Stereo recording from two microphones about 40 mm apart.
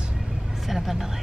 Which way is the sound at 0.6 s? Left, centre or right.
Centre.